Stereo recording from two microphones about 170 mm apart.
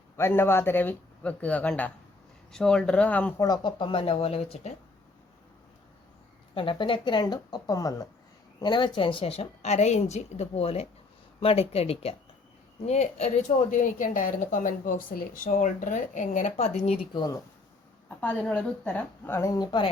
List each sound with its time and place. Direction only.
0.2 s a woman's voice: 15° left (ahead or behind)
3.4 s a woman's voice: 25° left (ahead or behind)
6.5 s a woman's voice: 30° left (ahead or behind); by 15.4 s 55° left (ahead or behind)
15.4 s speech: 45° left (ahead or behind)
17.2 s speech: 20° left (ahead or behind)
18.1 s a woman's voice: 10° left (ahead or behind); by 19.9 s 25° left (ahead or behind)